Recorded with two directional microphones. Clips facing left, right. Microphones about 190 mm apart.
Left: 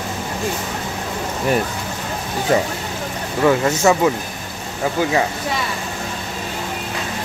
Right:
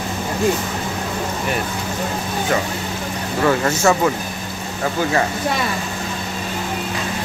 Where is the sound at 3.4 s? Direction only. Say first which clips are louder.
Left 2 dB; 15° left (ahead or behind).